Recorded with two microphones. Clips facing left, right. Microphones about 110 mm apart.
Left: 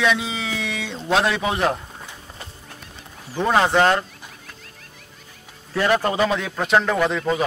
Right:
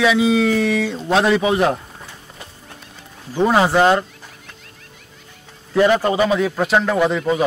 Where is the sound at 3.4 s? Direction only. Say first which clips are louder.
Right 3 dB; 5° right (ahead or behind).